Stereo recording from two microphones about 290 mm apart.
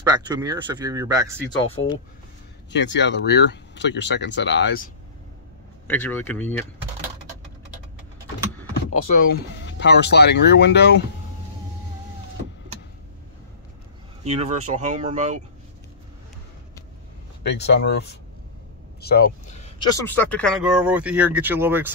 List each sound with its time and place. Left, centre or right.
0.0 s speech: centre
1.8 s speech: left
5.9 s speech: centre
9.1 s speech: left
14.2 s speech: right
17.4 s speech: left
18.9 s a sound: left
20.0 s speech: centre